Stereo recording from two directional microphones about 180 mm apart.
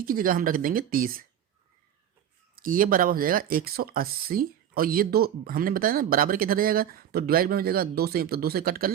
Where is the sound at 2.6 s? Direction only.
50° right (ahead or behind).